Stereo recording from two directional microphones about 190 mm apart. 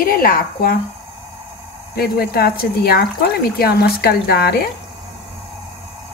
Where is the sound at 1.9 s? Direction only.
55° left (ahead or behind).